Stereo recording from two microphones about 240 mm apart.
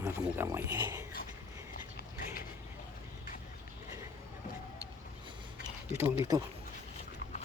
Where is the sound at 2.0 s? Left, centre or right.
Left.